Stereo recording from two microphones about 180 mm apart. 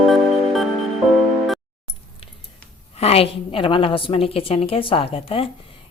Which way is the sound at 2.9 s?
35° left (ahead or behind).